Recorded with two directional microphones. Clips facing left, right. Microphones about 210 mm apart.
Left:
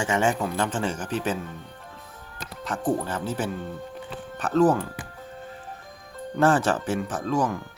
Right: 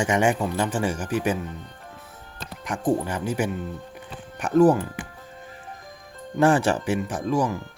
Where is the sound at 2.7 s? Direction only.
15° right (ahead or behind).